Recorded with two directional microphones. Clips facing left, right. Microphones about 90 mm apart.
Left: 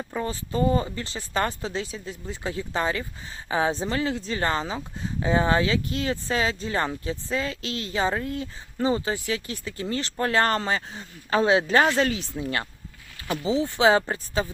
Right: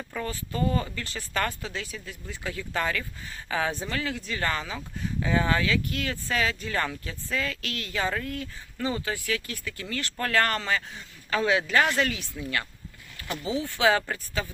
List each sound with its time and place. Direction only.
0.0 s speech: 25° left (ahead or behind)